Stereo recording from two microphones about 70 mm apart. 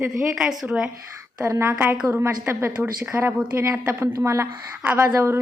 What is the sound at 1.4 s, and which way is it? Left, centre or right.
A woman's voice, right.